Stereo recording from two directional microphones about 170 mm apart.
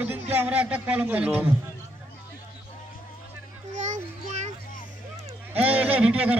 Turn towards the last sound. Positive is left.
turn(degrees=-10)  # may be behind; listen again after turning